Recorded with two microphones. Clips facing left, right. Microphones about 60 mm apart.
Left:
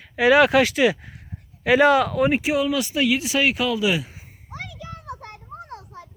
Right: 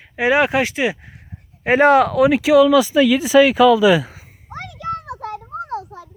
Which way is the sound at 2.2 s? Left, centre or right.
Right.